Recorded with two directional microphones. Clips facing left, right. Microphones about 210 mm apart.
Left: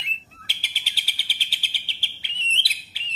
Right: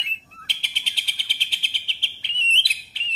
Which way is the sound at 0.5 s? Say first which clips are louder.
Even; 5° left (ahead or behind).